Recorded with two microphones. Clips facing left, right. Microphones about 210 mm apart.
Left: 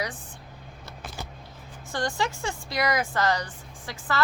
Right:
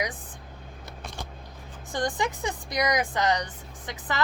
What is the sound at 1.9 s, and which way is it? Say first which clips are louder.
Speech: right 1 dB; 20° right (ahead or behind).